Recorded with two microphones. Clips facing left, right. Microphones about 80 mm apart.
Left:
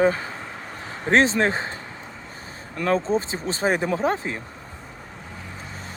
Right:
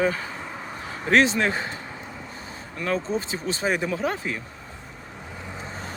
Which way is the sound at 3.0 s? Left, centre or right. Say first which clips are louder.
Left 4 dB; left.